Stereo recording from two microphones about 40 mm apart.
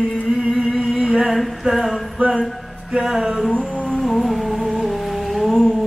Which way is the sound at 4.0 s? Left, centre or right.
Centre.